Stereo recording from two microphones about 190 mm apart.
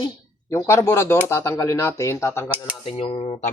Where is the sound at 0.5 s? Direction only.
15° left (ahead or behind).